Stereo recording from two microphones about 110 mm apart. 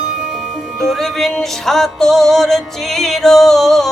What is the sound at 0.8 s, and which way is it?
Music, 5° left (ahead or behind).